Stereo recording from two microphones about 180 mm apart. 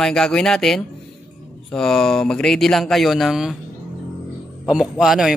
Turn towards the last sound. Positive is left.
turn(degrees=0)  # may be behind; listen again after turning